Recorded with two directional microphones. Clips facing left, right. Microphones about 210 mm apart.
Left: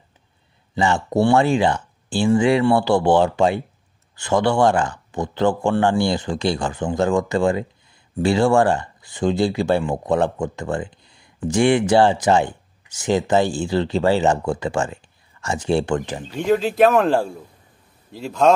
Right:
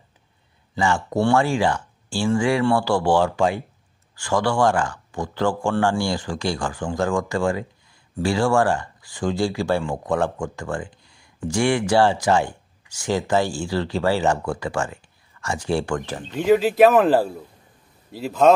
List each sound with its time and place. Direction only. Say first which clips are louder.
0.7 s speech: left 3 dB; 20° left (ahead or behind)
16.3 s speech: right 1 dB; 5° right (ahead or behind)